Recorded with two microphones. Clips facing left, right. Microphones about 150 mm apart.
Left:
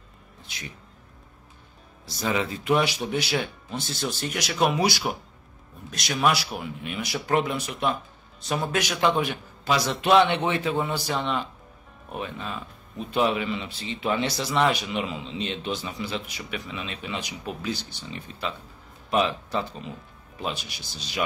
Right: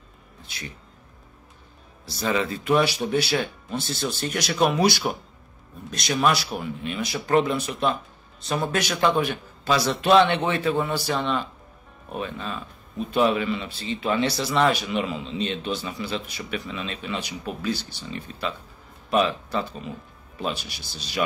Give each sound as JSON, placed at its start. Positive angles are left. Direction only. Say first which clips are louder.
{"t": 2.0, "sound": "speech", "louder": "right 2 dB", "side_deg": 15}